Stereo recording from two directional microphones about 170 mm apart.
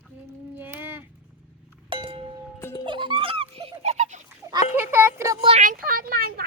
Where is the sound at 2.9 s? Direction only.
30° right (ahead or behind).